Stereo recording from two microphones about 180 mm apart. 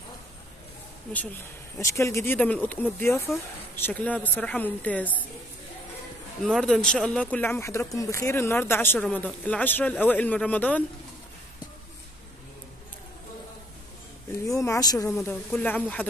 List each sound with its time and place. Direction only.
1.1 s speech: 10° left (ahead or behind)
6.4 s speech: 5° left (ahead or behind)
14.3 s speech: 15° left (ahead or behind)
15.2 s speech: 10° left (ahead or behind)